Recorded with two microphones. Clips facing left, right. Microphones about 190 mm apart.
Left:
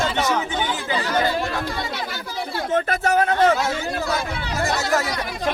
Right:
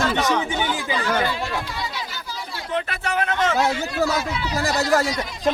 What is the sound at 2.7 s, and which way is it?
Speech, 40° left (ahead or behind).